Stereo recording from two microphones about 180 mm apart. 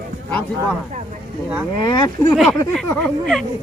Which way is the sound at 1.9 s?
20° left (ahead or behind).